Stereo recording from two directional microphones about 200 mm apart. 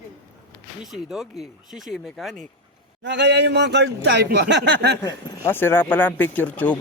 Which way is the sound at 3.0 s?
60° right (ahead or behind).